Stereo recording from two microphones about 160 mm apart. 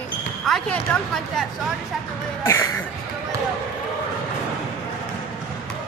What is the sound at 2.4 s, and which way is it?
Throat clearing, 15° left (ahead or behind).